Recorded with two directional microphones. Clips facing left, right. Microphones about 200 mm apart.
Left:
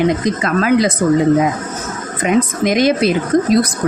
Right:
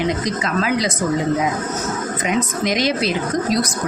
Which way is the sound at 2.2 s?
50° left (ahead or behind).